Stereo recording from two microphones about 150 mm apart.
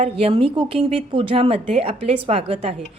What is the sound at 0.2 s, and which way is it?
A woman's voice, 40° right (ahead or behind).